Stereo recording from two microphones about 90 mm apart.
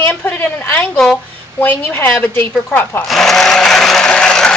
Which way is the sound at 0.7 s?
15° left (ahead or behind).